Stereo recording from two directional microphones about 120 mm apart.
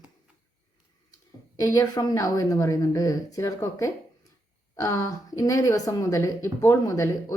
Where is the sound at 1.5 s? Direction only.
25° left (ahead or behind).